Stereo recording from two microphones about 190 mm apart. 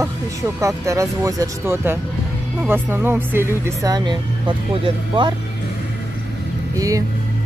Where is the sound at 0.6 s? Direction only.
15° right (ahead or behind).